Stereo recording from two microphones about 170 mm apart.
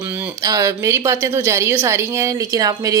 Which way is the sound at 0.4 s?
20° right (ahead or behind).